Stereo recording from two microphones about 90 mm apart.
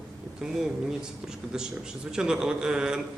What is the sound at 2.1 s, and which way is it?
Speech, 10° right (ahead or behind).